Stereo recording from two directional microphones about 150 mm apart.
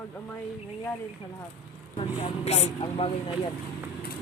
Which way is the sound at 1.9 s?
45° left (ahead or behind).